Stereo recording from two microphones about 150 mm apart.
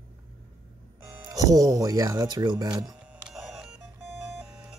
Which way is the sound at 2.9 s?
10° right (ahead or behind).